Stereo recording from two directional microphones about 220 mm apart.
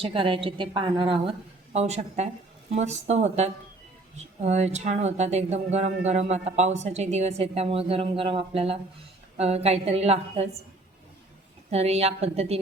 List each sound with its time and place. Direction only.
0.0 s a woman's voice: 25° right (ahead or behind)
11.7 s a woman's voice: 30° right (ahead or behind)